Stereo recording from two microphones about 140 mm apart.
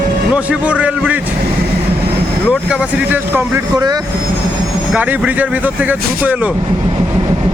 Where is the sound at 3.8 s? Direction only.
30° right (ahead or behind).